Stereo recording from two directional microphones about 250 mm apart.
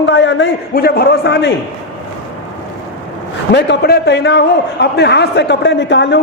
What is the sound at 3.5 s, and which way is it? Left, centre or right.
A man's voice, left.